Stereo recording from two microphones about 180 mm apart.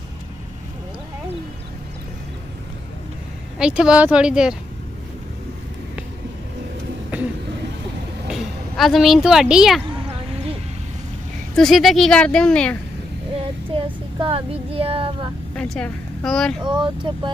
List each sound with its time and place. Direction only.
3.5 s speech: 5° right (ahead or behind)
8.3 s speech: centre (ahead or behind)
11.5 s speech: centre (ahead or behind)
13.7 s a sound: 30° right (ahead or behind)
14.2 s child singing: 30° right (ahead or behind)
15.5 s speech: 5° left (ahead or behind)
16.6 s speech: 25° right (ahead or behind)